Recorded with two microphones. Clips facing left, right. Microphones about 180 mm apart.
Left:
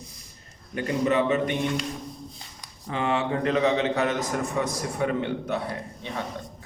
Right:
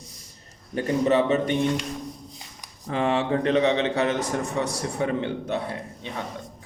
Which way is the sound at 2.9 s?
35° right (ahead or behind).